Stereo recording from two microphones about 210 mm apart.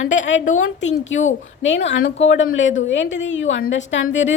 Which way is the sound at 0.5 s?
60° left (ahead or behind).